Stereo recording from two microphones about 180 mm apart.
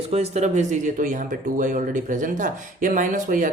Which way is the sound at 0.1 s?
35° right (ahead or behind).